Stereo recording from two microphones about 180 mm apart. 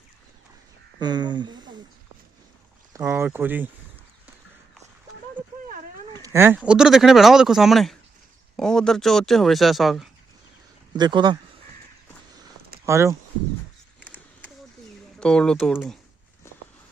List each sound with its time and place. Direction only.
0.9 s speech: 25° right (ahead or behind)
2.9 s speech: 15° right (ahead or behind)
6.1 s a sound: 15° right (ahead or behind)
6.6 s speech: 5° right (ahead or behind)
10.9 s speech: 25° right (ahead or behind)
12.8 s speech: 15° right (ahead or behind)
15.2 s speech: 5° left (ahead or behind)